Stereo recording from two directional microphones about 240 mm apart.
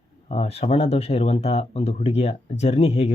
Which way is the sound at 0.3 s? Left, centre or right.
Left.